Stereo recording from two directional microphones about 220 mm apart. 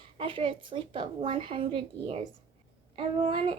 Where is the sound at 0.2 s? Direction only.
25° right (ahead or behind).